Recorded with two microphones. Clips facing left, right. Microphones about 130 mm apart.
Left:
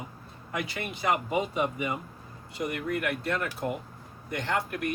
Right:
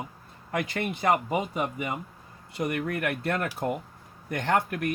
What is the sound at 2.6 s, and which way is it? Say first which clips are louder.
Speech: right 2 dB; 55° right (ahead or behind).